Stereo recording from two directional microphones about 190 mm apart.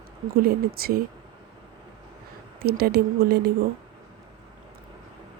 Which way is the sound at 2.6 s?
55° right (ahead or behind).